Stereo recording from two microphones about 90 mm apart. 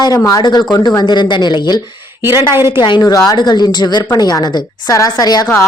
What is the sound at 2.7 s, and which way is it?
Speech, 55° left (ahead or behind).